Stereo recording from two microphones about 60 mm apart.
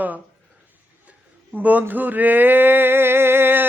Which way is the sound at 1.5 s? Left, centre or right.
Right.